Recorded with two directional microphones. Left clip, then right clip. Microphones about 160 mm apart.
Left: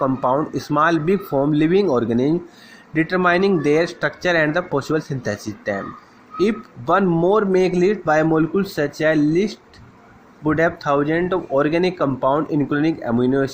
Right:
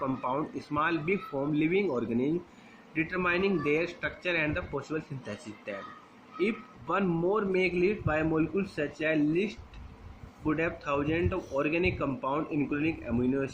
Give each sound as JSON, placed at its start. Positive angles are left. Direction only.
{"t": 0.0, "sound": "speech", "side_deg": 45}